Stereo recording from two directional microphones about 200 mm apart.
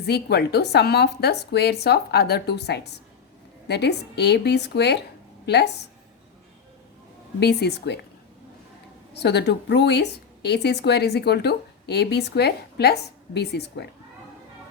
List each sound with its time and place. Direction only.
0.0 s a woman's voice: 55° left (ahead or behind)
7.3 s a woman's voice: 55° left (ahead or behind)
9.1 s a woman's voice: 55° left (ahead or behind)